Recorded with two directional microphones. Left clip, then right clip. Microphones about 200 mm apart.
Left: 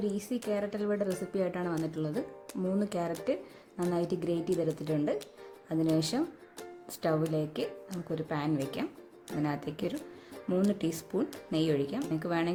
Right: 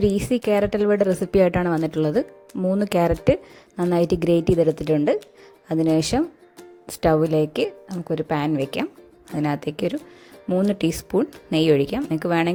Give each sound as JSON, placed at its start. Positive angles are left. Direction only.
{"t": 0.0, "sound": "a woman's voice", "side_deg": -40}